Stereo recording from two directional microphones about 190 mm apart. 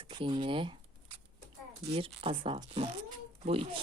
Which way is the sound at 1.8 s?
30° right (ahead or behind).